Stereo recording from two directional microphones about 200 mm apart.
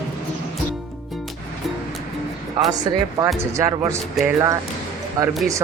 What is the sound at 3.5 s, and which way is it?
Speech, 15° right (ahead or behind).